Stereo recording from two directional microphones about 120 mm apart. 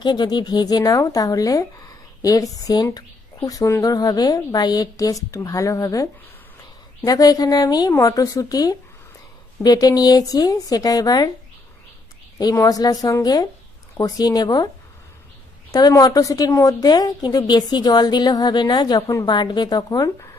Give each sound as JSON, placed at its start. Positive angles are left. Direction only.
{"t": 0.0, "sound": "a woman's voice", "side_deg": 40}
{"t": 12.4, "sound": "a woman's voice", "side_deg": 30}
{"t": 15.7, "sound": "a woman's voice", "side_deg": 30}